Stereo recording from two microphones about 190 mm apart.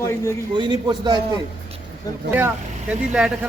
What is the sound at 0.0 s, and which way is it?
Speech, 15° left (ahead or behind).